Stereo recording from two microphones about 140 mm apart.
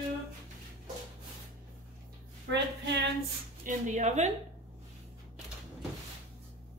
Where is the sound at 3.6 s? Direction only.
60° right (ahead or behind).